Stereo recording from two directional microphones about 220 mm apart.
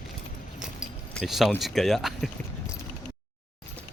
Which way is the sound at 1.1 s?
Centre (ahead or behind).